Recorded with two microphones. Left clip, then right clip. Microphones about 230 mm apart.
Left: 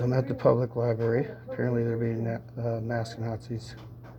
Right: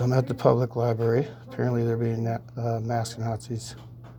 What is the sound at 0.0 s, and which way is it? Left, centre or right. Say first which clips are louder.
Speech: right 2 dB; right.